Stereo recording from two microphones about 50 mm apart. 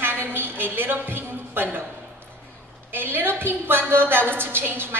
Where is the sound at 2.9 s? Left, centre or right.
Right.